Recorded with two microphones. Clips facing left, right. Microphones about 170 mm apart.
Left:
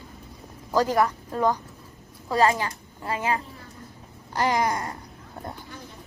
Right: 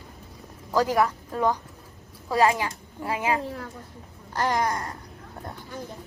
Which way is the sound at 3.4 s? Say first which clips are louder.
Right 10 dB; 90° right.